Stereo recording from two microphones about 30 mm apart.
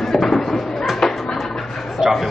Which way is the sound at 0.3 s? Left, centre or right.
Centre.